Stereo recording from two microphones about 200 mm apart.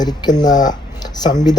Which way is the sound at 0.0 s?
20° left (ahead or behind).